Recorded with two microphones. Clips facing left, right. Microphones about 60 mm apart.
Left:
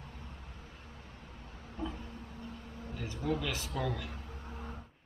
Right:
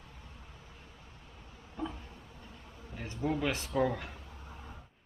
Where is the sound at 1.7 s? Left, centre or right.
Centre.